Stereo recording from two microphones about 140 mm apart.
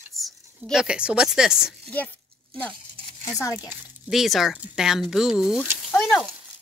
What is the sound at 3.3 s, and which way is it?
Speech, 25° left (ahead or behind).